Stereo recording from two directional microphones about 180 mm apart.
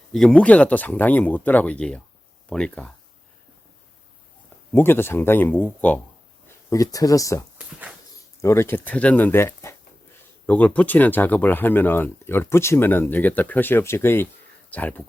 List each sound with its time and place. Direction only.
0.1 s speech: 5° left (ahead or behind)
4.7 s speech: 10° left (ahead or behind)